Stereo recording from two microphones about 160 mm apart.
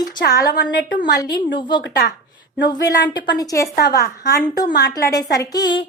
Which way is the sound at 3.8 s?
70° left (ahead or behind).